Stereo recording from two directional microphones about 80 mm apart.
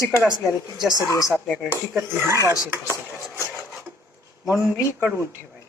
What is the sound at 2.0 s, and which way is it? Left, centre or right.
Speech, right.